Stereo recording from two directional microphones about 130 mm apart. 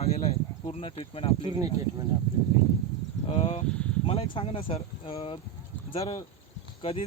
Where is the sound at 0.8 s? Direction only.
45° left (ahead or behind).